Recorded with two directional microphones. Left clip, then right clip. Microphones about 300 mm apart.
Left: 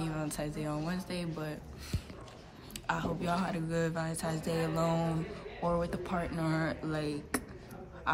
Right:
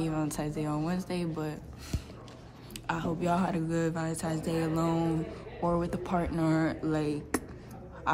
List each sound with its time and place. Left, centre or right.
0.0 s speech: centre
2.9 s speech: centre